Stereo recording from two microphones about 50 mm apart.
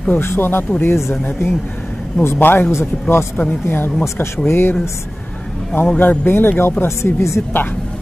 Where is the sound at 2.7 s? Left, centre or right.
Left.